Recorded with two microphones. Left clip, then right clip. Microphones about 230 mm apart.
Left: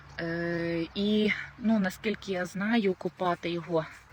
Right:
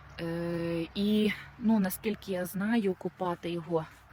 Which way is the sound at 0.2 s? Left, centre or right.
Centre.